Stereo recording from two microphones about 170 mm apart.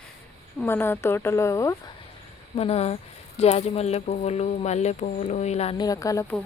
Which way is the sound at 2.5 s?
35° left (ahead or behind).